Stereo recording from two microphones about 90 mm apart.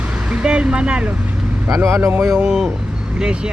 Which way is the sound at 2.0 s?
25° right (ahead or behind).